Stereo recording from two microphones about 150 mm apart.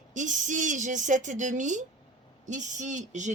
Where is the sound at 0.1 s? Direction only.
55° right (ahead or behind).